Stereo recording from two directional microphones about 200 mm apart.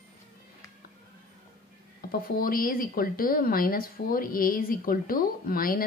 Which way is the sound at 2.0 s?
45° left (ahead or behind).